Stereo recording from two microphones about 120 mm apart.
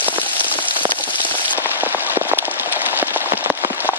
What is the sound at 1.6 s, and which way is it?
Rain on surface, 15° right (ahead or behind).